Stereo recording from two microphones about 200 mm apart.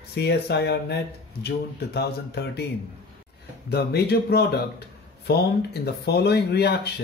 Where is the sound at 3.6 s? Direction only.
55° left (ahead or behind).